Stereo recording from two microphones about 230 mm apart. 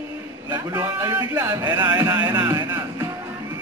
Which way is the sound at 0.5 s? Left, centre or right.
Centre.